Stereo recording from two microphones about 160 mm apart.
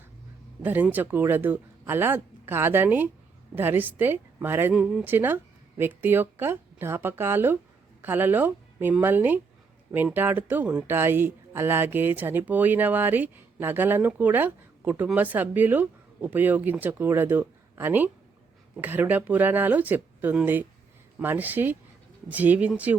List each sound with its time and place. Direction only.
0.6 s speech: 10° right (ahead or behind)